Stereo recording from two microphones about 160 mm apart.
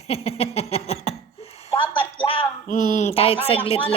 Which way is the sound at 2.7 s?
45° left (ahead or behind).